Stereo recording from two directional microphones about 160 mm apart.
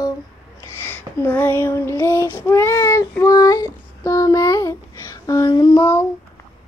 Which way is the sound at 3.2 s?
20° left (ahead or behind).